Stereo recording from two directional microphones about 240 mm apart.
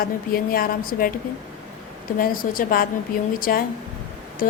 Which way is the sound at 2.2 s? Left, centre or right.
Left.